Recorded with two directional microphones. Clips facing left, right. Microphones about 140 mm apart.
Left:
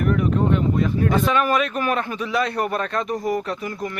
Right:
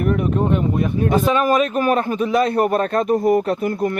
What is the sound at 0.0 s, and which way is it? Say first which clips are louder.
Speech: right 1 dB; 25° right (ahead or behind).